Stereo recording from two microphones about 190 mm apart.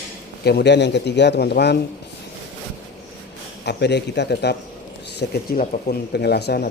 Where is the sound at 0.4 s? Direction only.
60° left (ahead or behind).